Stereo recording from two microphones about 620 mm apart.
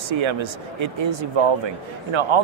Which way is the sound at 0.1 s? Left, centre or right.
Right.